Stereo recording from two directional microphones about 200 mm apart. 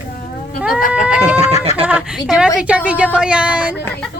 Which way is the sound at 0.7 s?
45° left (ahead or behind).